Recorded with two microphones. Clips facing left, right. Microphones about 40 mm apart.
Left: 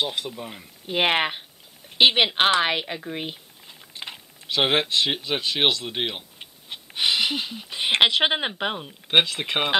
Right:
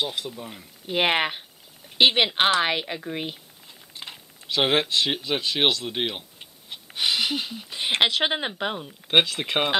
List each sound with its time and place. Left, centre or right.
0.0 s speech: centre
2.0 s speech: centre
3.6 s speech: centre
6.4 s speech: left; by 9.8 s centre